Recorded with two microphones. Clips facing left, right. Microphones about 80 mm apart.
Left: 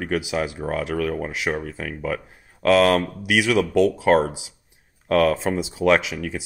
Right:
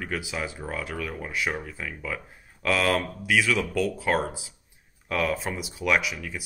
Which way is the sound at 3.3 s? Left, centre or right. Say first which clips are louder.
Left 4 dB; left.